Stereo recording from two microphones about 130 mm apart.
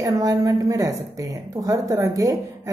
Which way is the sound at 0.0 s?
25° right (ahead or behind).